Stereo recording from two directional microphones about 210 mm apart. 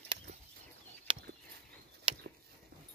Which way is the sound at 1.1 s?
25° right (ahead or behind).